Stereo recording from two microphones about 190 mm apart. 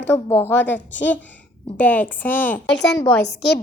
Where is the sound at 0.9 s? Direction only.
70° left (ahead or behind).